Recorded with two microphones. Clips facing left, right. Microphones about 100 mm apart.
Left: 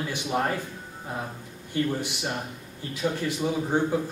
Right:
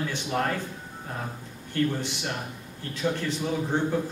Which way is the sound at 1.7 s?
15° left (ahead or behind).